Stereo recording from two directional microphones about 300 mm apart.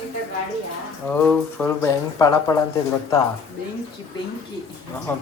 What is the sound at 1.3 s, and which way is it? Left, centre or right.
Speech, centre.